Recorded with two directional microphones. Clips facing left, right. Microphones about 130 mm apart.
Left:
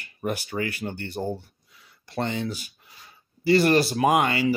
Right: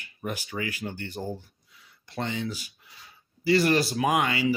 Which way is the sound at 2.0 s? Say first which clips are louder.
Left 3 dB; 45° left (ahead or behind).